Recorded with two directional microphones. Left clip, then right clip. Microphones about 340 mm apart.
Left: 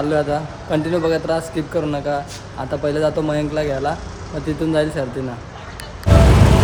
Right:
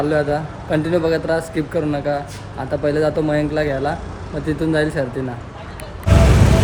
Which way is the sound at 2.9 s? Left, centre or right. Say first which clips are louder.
Right 1 dB; centre.